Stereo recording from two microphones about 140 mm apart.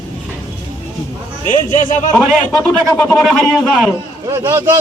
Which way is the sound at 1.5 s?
60° left (ahead or behind).